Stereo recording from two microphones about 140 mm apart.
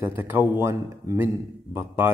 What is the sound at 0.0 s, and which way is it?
Speech, 15° right (ahead or behind).